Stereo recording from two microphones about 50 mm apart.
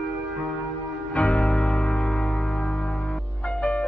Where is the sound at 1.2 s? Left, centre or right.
Left.